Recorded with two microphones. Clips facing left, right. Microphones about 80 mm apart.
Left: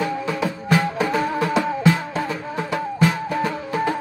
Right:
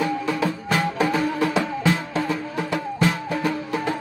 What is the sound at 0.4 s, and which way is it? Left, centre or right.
Music, centre.